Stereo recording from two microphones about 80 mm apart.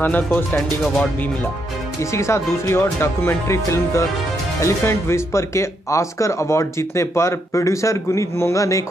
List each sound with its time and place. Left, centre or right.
0.0 s speech: left
2.1 s speech: left